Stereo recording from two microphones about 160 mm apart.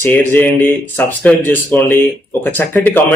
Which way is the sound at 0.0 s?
10° left (ahead or behind).